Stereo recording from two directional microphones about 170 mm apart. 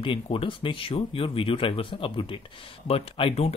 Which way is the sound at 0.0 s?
30° left (ahead or behind).